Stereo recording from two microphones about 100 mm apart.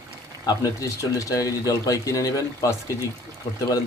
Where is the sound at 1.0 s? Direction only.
35° left (ahead or behind).